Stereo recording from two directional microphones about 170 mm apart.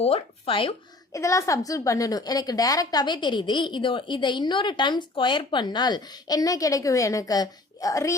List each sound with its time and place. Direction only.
0.0 s speech: 35° left (ahead or behind)
1.1 s a woman's voice: 20° left (ahead or behind)